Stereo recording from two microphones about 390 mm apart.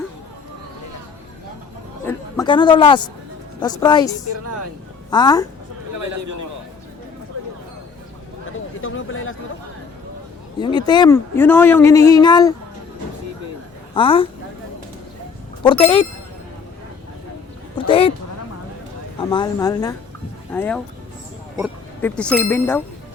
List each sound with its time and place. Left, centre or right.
2.0 s a woman's voice: centre
5.1 s speech: centre
8.5 s a sound: left
10.6 s speech: centre
13.9 s speech: centre
15.6 s speech: centre
17.8 s a sound: centre
19.2 s speech: centre